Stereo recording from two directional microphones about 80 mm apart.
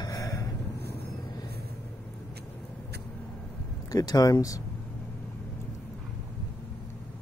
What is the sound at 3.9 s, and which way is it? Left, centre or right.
Speech, left.